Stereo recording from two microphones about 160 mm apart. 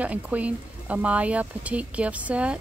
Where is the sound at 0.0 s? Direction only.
10° right (ahead or behind).